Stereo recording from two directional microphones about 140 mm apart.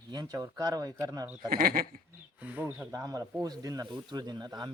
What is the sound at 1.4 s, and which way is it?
Speech, 90° right.